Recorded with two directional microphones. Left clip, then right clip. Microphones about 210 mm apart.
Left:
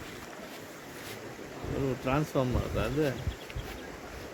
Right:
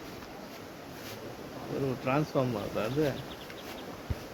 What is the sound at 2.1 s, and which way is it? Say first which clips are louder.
Speech: right 1 dB; 45° left (ahead or behind).